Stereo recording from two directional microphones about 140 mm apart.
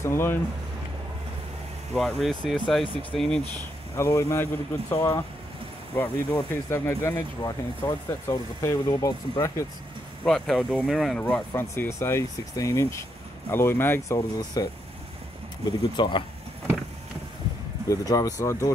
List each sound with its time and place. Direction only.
0.0 s speech: 20° left (ahead or behind)
2.0 s speech: centre (ahead or behind)
2.9 s speech: 40° left (ahead or behind)
3.2 s speech: 5° left (ahead or behind)
3.9 s speech: 20° left (ahead or behind)
10.2 s speech: 5° left (ahead or behind); by 14.7 s 25° left (ahead or behind)
16.0 s speech: 35° left (ahead or behind)
17.8 s speech: 25° left (ahead or behind)